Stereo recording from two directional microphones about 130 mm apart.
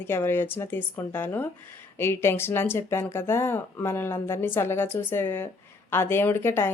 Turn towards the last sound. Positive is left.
turn(degrees=20)  # may be behind; listen again after turning